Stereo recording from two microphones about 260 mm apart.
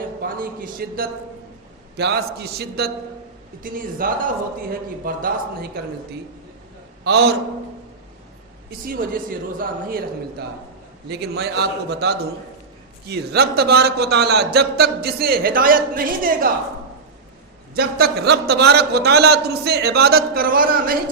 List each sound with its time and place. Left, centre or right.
0.2 s a man's voice: right
7.0 s a man's voice: right
8.9 s a man's voice: right
17.7 s a man's voice: right